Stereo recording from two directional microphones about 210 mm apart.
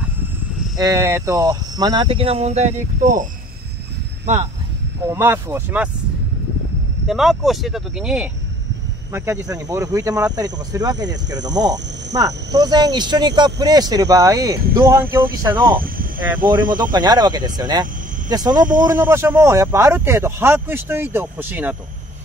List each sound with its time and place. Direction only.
0.7 s speech: 15° right (ahead or behind); by 3.3 s 35° right (ahead or behind)
5.1 s speech: 10° right (ahead or behind)
7.1 s speech: centre (ahead or behind)
15.7 s speech: 40° right (ahead or behind)
16.9 s speech: 20° right (ahead or behind)
18.6 s speech: 40° right (ahead or behind)
18.9 s speech: 10° right (ahead or behind)